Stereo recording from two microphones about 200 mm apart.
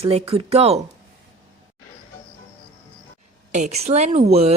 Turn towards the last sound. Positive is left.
turn(degrees=-30)  # may be behind; listen again after turning